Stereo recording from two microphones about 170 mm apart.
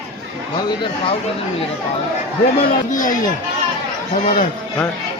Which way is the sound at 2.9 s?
50° left (ahead or behind).